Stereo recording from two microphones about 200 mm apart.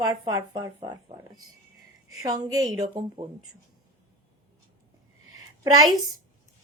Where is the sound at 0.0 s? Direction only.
20° right (ahead or behind).